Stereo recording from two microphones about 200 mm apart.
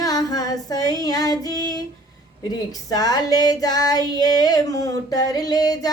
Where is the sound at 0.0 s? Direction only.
20° left (ahead or behind).